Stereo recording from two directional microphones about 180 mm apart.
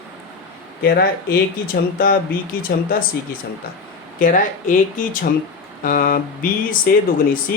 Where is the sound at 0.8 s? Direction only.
55° left (ahead or behind).